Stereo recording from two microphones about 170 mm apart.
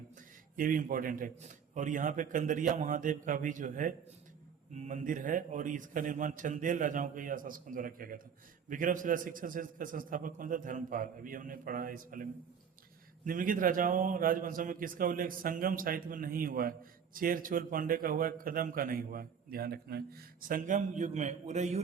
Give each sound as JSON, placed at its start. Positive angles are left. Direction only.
{"t": 0.5, "sound": "a man's voice", "side_deg": -50}